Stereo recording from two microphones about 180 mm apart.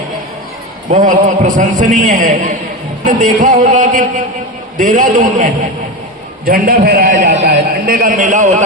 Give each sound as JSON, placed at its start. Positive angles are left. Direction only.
{"t": 0.9, "sound": "a man's voice", "side_deg": -45}